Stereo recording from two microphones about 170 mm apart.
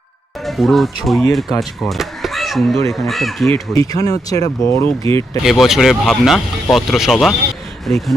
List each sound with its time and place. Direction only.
0.4 s speech: centre (ahead or behind)
3.8 s speech: 20° left (ahead or behind)
5.5 s speech: centre (ahead or behind)